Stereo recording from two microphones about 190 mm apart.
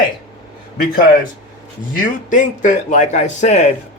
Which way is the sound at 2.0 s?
40° left (ahead or behind).